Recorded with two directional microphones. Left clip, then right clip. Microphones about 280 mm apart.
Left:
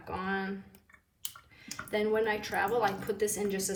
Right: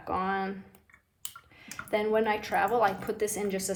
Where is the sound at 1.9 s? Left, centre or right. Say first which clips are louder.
Right 3 dB; right.